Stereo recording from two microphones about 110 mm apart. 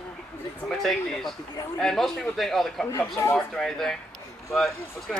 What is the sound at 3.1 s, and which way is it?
Speech, 30° left (ahead or behind).